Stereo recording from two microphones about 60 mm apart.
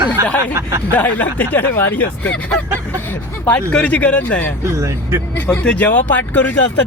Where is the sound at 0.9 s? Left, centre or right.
Left.